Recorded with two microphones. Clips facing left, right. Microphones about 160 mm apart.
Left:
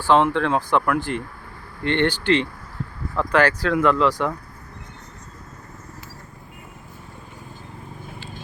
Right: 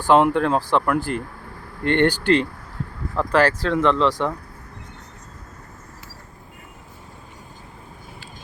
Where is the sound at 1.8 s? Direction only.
45° right (ahead or behind).